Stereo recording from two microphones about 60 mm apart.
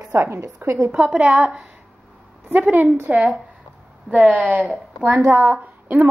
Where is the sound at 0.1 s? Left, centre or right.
Right.